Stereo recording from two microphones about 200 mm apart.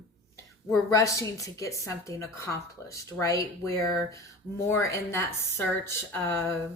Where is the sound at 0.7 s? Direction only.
15° left (ahead or behind).